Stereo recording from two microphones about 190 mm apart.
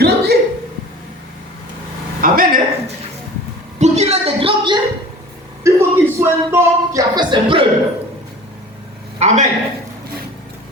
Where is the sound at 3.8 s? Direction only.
35° right (ahead or behind).